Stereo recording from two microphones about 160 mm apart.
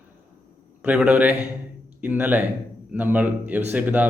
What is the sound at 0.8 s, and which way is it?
A man's voice, 10° right (ahead or behind).